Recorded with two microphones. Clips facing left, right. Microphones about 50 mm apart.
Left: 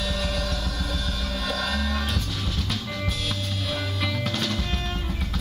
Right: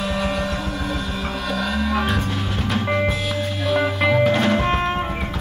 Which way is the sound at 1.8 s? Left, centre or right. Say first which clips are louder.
Right 7 dB; right.